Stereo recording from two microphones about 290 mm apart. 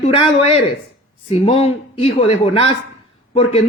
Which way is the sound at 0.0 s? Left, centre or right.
Left.